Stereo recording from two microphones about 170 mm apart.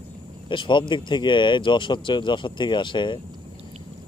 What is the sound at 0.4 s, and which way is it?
Speech, 30° left (ahead or behind).